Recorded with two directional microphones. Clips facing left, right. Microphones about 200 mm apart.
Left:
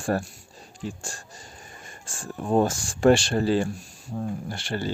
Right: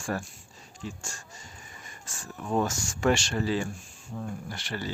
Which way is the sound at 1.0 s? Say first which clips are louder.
Left 4 dB; 35° left (ahead or behind).